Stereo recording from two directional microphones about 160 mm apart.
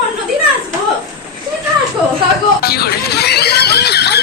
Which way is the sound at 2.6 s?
75° left (ahead or behind).